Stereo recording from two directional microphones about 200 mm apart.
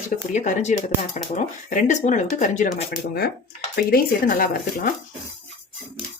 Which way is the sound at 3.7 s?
50° left (ahead or behind).